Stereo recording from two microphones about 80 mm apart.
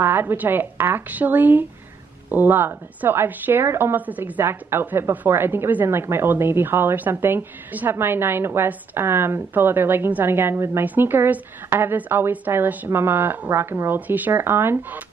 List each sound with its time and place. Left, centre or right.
0.0 s a woman's voice: right